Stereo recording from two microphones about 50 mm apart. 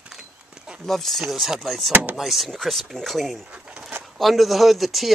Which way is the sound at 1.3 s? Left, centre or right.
Centre.